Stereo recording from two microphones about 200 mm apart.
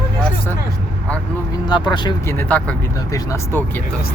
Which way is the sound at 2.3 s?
5° left (ahead or behind).